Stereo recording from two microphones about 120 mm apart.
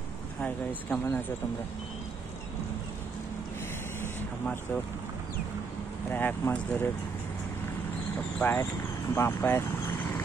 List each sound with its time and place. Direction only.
0.4 s speech: 10° left (ahead or behind)
6.1 s speech: 15° left (ahead or behind)
8.4 s speech: 20° left (ahead or behind)